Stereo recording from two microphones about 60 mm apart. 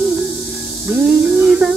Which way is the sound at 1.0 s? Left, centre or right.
Centre.